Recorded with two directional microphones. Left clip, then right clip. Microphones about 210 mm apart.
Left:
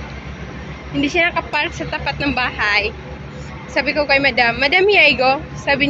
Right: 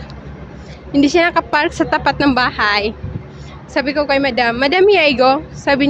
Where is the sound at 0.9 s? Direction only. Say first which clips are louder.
Right 4 dB; 45° right (ahead or behind).